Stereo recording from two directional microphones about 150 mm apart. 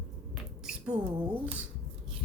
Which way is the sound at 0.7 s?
5° right (ahead or behind).